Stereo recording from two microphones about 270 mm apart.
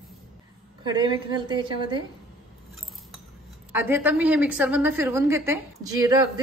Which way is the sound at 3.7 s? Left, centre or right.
Centre.